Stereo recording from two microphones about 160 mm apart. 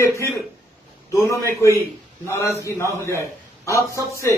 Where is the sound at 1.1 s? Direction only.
20° left (ahead or behind).